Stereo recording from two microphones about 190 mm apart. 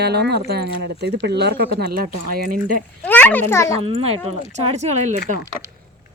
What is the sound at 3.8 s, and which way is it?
Speech, 30° right (ahead or behind).